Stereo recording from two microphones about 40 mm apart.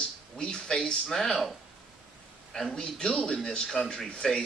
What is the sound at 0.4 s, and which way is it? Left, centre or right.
A man's voice, centre.